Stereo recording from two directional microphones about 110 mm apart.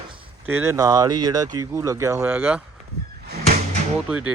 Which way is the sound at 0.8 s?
35° right (ahead or behind).